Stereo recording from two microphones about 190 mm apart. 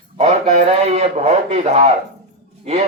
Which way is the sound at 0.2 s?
35° right (ahead or behind).